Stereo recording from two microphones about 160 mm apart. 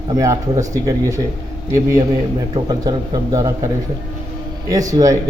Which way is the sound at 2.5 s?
25° right (ahead or behind).